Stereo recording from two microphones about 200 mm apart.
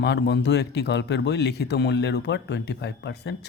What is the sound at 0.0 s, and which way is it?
Speech, 60° left (ahead or behind).